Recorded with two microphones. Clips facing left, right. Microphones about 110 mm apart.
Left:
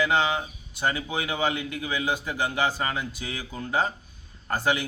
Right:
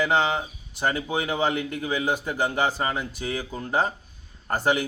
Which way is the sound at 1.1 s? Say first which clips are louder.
Right 2 dB; 40° right (ahead or behind).